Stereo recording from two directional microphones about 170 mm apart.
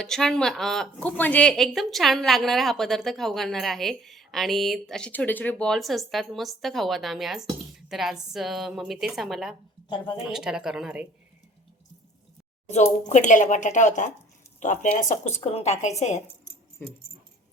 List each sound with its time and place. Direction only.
0.0 s speech: 5° left (ahead or behind)
12.6 s a woman's voice: 40° left (ahead or behind)